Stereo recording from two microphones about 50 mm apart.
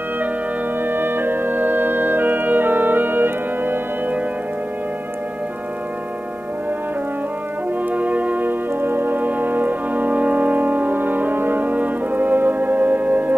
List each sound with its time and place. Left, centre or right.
0.8 s brass instrument: right
7.9 s brass instrument: right